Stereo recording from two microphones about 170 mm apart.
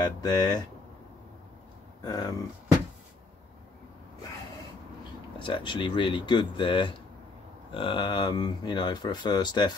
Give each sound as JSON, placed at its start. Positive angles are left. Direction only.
{"t": 0.2, "sound": "speech", "side_deg": 25}
{"t": 2.0, "sound": "speech", "side_deg": 20}
{"t": 5.4, "sound": "speech", "side_deg": 30}